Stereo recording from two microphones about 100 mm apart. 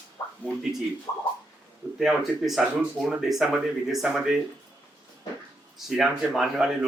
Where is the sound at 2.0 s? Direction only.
Centre (ahead or behind).